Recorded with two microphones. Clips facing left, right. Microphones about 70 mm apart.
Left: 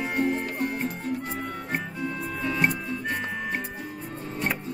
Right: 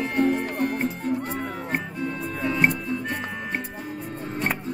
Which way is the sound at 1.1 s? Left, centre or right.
Right.